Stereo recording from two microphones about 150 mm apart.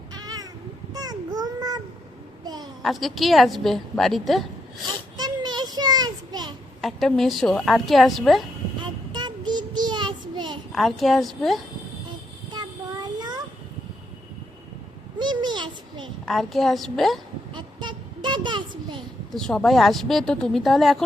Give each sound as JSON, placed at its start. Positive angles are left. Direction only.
{"t": 0.1, "sound": "meow", "side_deg": -25}
{"t": 0.9, "sound": "child singing", "side_deg": -25}
{"t": 2.4, "sound": "a sound", "side_deg": -25}
{"t": 2.8, "sound": "a woman's voice", "side_deg": 0}
{"t": 5.1, "sound": "a sound", "side_deg": -25}
{"t": 6.8, "sound": "a woman's voice", "side_deg": 0}
{"t": 8.8, "sound": "child singing", "side_deg": -30}
{"t": 10.7, "sound": "a woman's voice", "side_deg": 0}
{"t": 12.5, "sound": "child singing", "side_deg": -25}
{"t": 15.2, "sound": "a sound", "side_deg": -30}
{"t": 16.2, "sound": "a woman's voice", "side_deg": 0}
{"t": 17.5, "sound": "a sound", "side_deg": -30}
{"t": 19.3, "sound": "a woman's voice", "side_deg": 5}